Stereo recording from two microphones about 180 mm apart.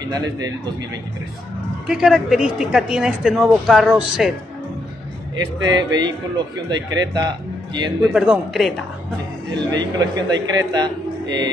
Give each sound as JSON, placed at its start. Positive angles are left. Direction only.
{"t": 0.1, "sound": "a man's voice", "side_deg": -25}
{"t": 1.9, "sound": "speech", "side_deg": 0}
{"t": 5.3, "sound": "a man's voice", "side_deg": -25}
{"t": 8.1, "sound": "speech", "side_deg": 0}
{"t": 9.5, "sound": "a man's voice", "side_deg": -25}